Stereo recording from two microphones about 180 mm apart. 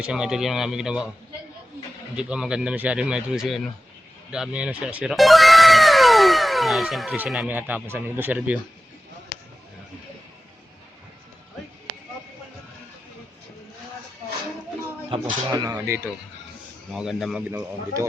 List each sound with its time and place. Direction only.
0.0 s speech: 5° right (ahead or behind)
2.1 s speech: 5° right (ahead or behind)
15.1 s speech: 20° right (ahead or behind)
16.9 s speech: centre (ahead or behind)
17.5 s a man's voice: 15° right (ahead or behind)